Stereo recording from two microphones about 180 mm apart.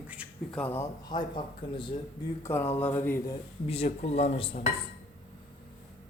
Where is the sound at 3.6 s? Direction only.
35° left (ahead or behind).